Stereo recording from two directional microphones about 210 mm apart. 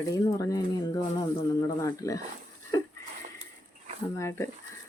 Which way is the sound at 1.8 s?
15° left (ahead or behind).